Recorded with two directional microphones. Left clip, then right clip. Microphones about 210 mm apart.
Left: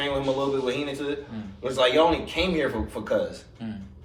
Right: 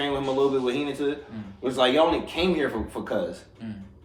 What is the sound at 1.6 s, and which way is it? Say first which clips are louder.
Speech: left 1 dB; 15° right (ahead or behind).